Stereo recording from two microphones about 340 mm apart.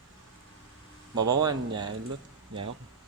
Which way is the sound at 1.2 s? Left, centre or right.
Centre.